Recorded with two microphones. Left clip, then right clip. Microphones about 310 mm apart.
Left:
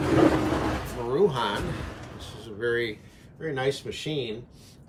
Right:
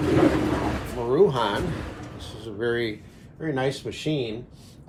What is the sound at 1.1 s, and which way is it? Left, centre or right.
Speech, centre.